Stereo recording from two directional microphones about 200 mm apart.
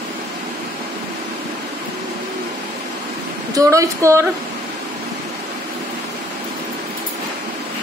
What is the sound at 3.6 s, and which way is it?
Speech, 15° right (ahead or behind).